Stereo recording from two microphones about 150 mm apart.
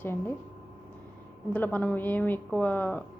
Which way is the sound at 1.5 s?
10° left (ahead or behind).